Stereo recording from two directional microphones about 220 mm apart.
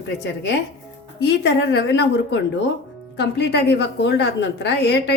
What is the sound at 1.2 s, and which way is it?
A woman's voice, 50° left (ahead or behind).